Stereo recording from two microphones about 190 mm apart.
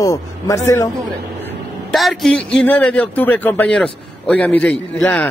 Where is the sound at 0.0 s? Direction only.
15° left (ahead or behind).